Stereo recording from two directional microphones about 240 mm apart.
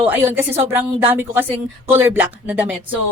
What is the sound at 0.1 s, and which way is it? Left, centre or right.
A woman's voice, centre.